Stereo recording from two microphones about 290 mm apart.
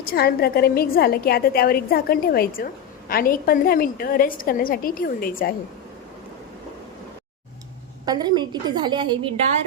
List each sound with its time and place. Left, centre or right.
0.0 s a woman's voice: left
8.0 s a woman's voice: centre